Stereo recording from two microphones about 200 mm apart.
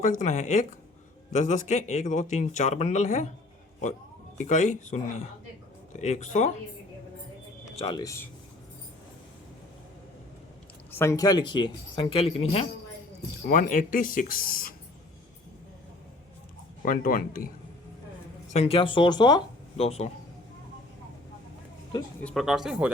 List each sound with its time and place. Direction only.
0.0 s speech: 40° left (ahead or behind)
4.4 s speech: 35° left (ahead or behind)
6.0 s speech: 35° left (ahead or behind)
7.8 s speech: 20° left (ahead or behind)
10.9 s speech: 15° left (ahead or behind); by 12.6 s 30° left (ahead or behind)
13.5 s speech: 40° left (ahead or behind)
16.8 s speech: 45° left (ahead or behind)
18.5 s speech: 30° left (ahead or behind)
22.2 s speech: 5° left (ahead or behind)